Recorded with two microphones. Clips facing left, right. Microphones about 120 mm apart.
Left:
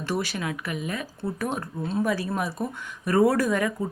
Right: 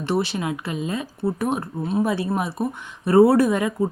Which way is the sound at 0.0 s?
25° right (ahead or behind).